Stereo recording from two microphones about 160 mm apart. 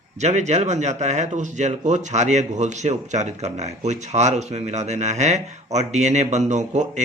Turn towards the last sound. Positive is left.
turn(degrees=-45)  # may be behind; listen again after turning